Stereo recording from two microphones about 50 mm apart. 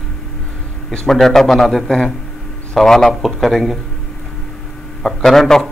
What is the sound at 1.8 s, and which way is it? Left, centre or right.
A man's voice, centre.